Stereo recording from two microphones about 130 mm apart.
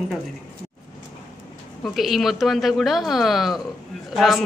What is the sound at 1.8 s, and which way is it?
A man's voice, centre (ahead or behind).